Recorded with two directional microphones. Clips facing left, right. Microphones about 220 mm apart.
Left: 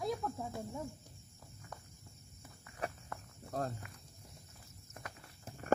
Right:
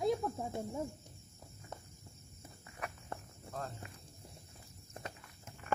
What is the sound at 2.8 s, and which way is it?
Cricket, 30° left (ahead or behind).